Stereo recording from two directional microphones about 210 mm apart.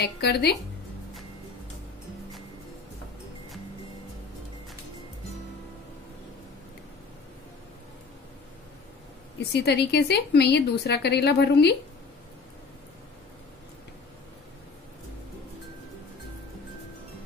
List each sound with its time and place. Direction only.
0.0 s a woman's voice: 50° left (ahead or behind)
9.4 s a woman's voice: 55° left (ahead or behind)